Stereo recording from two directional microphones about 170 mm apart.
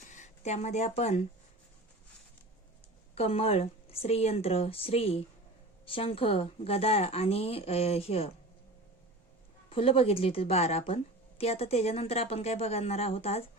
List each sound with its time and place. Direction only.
0.1 s speech: 45° left (ahead or behind)
3.2 s a woman's voice: 35° left (ahead or behind)
9.6 s a woman's voice: 35° left (ahead or behind)